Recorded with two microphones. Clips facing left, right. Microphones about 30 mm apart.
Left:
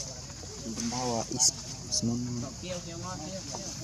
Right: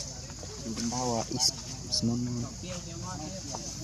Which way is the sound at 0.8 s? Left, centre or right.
Left.